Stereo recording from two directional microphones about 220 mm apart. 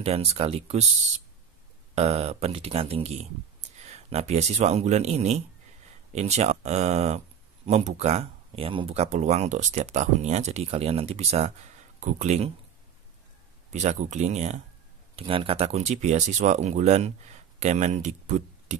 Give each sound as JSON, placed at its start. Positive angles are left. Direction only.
{"t": 0.0, "sound": "speech", "side_deg": -25}
{"t": 2.0, "sound": "speech", "side_deg": -30}
{"t": 13.7, "sound": "speech", "side_deg": -30}